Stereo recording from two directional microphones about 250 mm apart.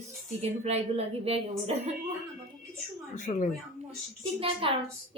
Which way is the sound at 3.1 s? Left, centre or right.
Left.